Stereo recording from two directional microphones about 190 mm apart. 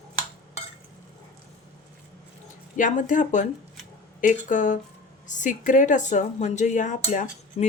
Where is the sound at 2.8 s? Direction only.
40° left (ahead or behind).